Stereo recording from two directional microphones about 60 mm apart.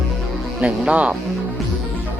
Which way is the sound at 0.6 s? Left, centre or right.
Centre.